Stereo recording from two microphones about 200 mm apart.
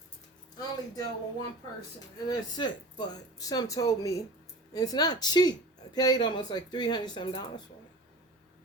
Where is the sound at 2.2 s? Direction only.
20° left (ahead or behind).